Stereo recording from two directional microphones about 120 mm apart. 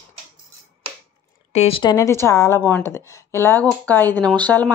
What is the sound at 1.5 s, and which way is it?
Speech, 65° left (ahead or behind).